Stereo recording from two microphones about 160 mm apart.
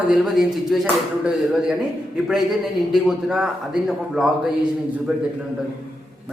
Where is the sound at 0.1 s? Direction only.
Centre (ahead or behind).